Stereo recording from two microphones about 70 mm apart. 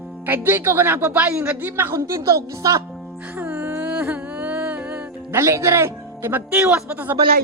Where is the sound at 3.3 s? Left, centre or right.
Right.